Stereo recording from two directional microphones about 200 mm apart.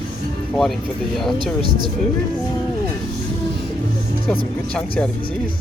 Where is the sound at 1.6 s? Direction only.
20° right (ahead or behind).